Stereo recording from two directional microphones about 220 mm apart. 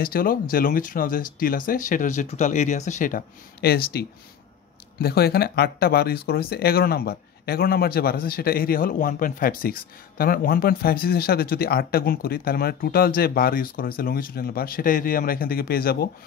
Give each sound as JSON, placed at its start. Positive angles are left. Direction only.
{"t": 0.0, "sound": "speech", "side_deg": 40}